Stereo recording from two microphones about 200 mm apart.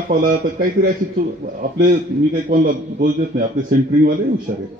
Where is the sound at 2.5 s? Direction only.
45° right (ahead or behind).